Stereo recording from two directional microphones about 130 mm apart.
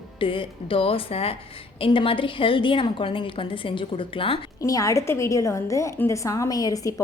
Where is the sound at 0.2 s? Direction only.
40° left (ahead or behind).